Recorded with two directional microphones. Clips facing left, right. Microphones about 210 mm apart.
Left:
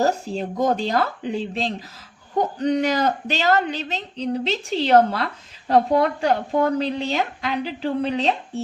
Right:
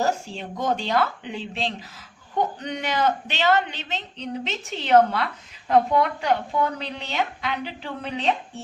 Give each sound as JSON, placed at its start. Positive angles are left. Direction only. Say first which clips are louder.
{"t": 0.0, "sound": "speech", "louder": "left 4 dB", "side_deg": 40}